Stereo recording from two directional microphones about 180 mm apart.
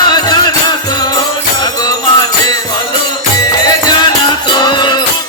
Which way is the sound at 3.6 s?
20° left (ahead or behind).